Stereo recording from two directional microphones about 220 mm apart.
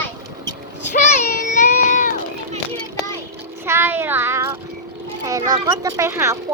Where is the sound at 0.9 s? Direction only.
30° left (ahead or behind).